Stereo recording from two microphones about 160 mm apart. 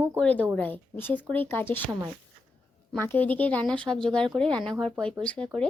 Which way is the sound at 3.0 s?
10° left (ahead or behind).